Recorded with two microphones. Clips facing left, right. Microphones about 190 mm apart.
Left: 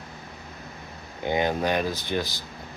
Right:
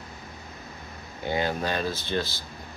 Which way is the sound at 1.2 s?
20° left (ahead or behind).